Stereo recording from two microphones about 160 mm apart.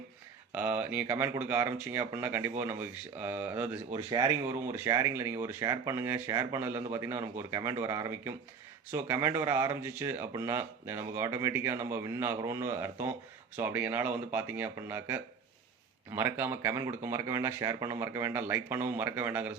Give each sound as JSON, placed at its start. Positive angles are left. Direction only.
{"t": 0.5, "sound": "speech", "side_deg": -10}
{"t": 3.9, "sound": "speech", "side_deg": -30}